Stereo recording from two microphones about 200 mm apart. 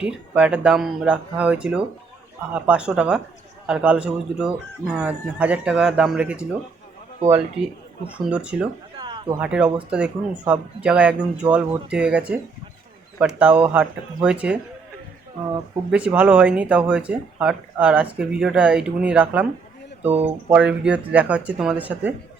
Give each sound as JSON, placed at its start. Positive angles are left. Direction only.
{"t": 0.0, "sound": "speech", "side_deg": -5}
{"t": 7.2, "sound": "a man's voice", "side_deg": -35}
{"t": 8.0, "sound": "speech", "side_deg": -5}
{"t": 9.0, "sound": "a sound", "side_deg": -20}
{"t": 9.4, "sound": "speech", "side_deg": -5}
{"t": 15.9, "sound": "speech", "side_deg": -5}